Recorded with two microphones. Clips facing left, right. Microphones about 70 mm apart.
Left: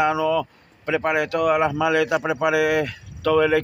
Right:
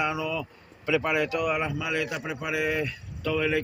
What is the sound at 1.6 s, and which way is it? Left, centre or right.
Speech, left.